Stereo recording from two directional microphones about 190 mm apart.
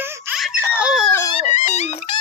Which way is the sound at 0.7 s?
5° right (ahead or behind).